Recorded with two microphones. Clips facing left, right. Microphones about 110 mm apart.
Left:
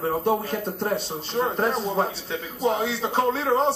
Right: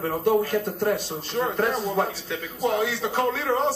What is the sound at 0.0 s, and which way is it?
Speech, 20° left (ahead or behind).